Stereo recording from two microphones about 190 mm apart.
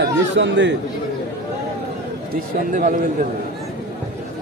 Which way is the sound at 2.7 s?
45° right (ahead or behind).